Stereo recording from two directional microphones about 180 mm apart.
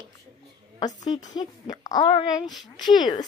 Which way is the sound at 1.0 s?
40° left (ahead or behind).